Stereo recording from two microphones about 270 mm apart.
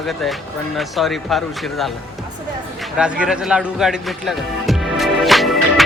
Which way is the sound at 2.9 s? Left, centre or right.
Centre.